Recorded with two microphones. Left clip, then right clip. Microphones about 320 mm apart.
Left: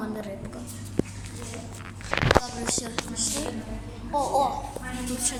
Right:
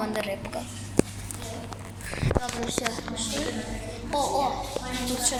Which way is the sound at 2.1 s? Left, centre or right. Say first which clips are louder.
Left 8 dB; left.